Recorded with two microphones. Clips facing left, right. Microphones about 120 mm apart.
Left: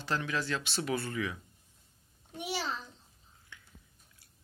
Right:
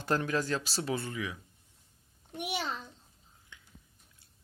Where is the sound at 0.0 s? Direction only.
45° right (ahead or behind).